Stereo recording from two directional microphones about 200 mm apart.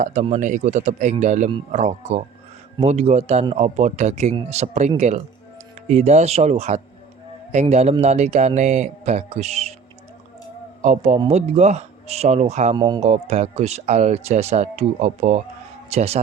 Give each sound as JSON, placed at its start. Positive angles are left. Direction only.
{"t": 0.0, "sound": "speech", "side_deg": -35}
{"t": 10.8, "sound": "speech", "side_deg": -35}
{"t": 12.7, "sound": "speech", "side_deg": -20}
{"t": 13.0, "sound": "speech", "side_deg": -35}